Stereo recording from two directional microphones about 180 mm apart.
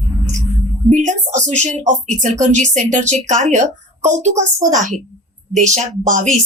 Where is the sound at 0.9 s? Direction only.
45° right (ahead or behind).